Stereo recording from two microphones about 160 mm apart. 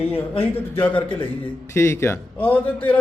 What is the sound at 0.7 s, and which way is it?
A man's voice, 10° left (ahead or behind).